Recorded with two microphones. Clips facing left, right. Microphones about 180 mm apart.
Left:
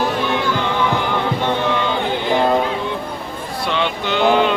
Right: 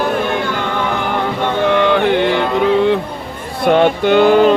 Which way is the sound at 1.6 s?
60° right (ahead or behind).